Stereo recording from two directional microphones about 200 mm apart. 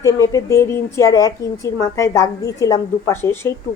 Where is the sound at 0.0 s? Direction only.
15° left (ahead or behind).